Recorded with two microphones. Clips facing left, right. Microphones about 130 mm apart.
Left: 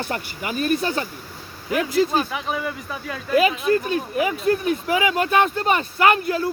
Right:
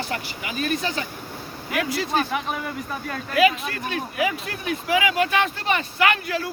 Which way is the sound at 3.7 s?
40° left (ahead or behind).